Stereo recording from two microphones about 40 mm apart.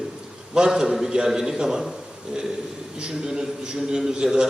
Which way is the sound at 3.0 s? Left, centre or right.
Centre.